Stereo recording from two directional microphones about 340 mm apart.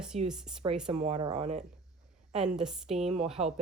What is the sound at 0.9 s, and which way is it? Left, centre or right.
Speech, centre.